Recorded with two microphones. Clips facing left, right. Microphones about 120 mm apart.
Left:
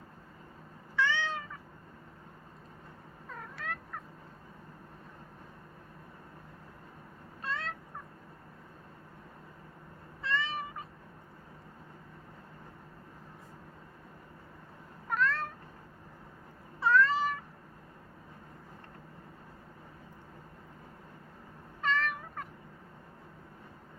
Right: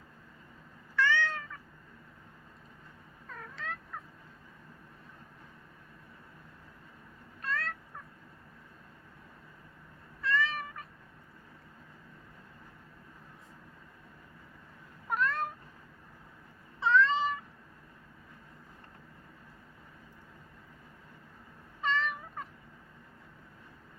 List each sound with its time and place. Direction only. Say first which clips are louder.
0.9 s cat: right 2 dB; 15° left (ahead or behind)
3.2 s cat: left 1 dB; 10° left (ahead or behind)
7.4 s cat: right 1 dB; 25° left (ahead or behind)
10.2 s cat: right 2 dB; 25° left (ahead or behind)
15.1 s cat: even; 10° right (ahead or behind)
16.8 s cat: even; 5° left (ahead or behind)
21.8 s cat: even; centre (ahead or behind)